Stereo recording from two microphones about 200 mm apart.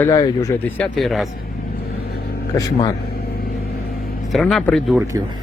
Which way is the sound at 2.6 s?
15° left (ahead or behind).